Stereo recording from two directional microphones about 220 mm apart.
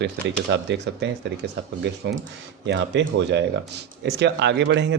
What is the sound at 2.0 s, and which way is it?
Speech, 55° right (ahead or behind).